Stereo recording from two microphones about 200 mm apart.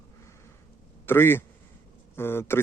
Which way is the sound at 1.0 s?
10° left (ahead or behind).